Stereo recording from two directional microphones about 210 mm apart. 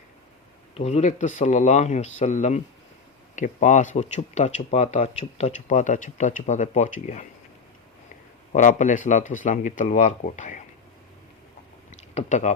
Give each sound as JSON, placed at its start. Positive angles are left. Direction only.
{"t": 0.9, "sound": "speech", "side_deg": 30}
{"t": 8.5, "sound": "speech", "side_deg": 35}
{"t": 12.1, "sound": "speech", "side_deg": 35}